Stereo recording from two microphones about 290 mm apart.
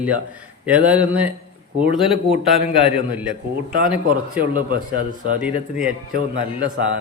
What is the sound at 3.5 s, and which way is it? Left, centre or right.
Speech, right.